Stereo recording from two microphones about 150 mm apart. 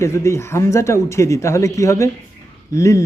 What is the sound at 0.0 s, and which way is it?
A man's voice, 20° left (ahead or behind).